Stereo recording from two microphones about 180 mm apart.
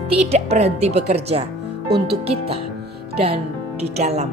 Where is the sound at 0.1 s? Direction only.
35° right (ahead or behind).